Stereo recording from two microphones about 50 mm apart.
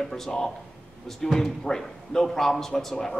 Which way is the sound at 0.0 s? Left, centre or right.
Centre.